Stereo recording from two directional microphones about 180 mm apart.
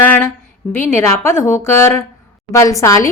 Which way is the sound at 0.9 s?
15° left (ahead or behind).